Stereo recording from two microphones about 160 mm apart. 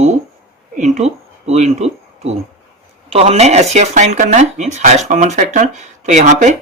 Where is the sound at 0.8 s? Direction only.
45° right (ahead or behind).